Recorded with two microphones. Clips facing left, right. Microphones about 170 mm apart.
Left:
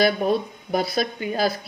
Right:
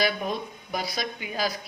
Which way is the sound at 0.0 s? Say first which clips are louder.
Left 7 dB; 35° left (ahead or behind).